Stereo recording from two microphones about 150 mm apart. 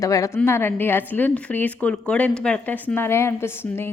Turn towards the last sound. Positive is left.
turn(degrees=15)  # may be behind; listen again after turning